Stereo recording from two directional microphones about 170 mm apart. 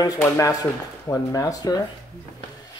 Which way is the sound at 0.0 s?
20° left (ahead or behind).